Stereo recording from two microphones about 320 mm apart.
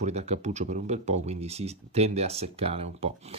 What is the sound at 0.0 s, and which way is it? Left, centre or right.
Speech, centre.